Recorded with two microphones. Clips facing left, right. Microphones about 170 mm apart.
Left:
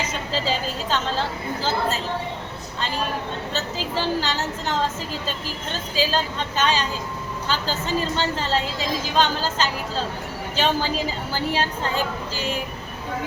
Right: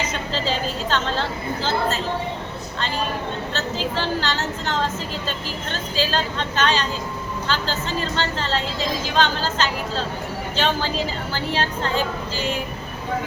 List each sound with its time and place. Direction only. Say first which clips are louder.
0.3 s a woman's voice: even; 5° left (ahead or behind)
3.9 s a woman's voice: left 4 dB; 10° left (ahead or behind)